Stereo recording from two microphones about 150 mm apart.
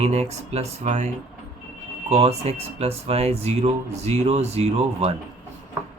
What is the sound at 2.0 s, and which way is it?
Speech, 45° right (ahead or behind).